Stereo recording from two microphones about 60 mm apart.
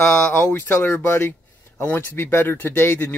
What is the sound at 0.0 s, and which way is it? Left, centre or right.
A man's voice, left.